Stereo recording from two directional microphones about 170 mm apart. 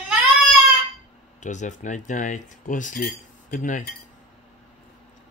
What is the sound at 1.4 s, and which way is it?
Speech, 45° left (ahead or behind).